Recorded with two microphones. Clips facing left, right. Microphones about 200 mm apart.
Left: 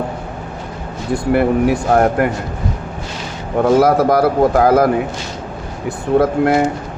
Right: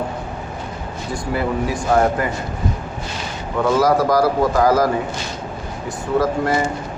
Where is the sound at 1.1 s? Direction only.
65° left (ahead or behind).